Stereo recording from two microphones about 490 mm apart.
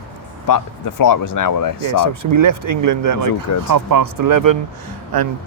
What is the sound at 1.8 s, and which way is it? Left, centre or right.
Speech, right.